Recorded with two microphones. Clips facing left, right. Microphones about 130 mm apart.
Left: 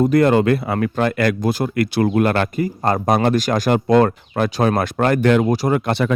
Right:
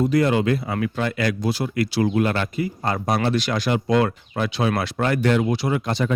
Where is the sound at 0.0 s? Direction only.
50° left (ahead or behind).